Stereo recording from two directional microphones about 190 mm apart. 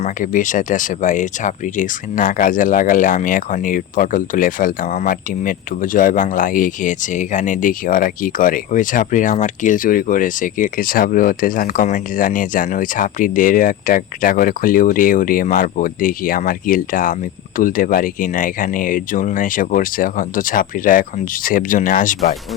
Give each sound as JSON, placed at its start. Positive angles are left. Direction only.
{"t": 0.0, "sound": "speech", "side_deg": 45}